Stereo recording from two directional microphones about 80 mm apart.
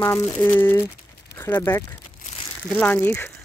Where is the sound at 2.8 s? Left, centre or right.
Centre.